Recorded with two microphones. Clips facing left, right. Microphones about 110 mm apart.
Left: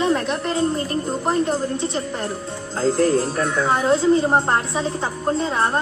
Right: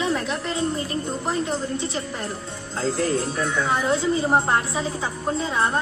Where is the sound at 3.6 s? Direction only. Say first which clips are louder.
Left 4 dB; 35° left (ahead or behind).